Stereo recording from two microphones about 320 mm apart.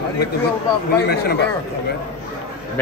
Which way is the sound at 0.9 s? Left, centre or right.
Left.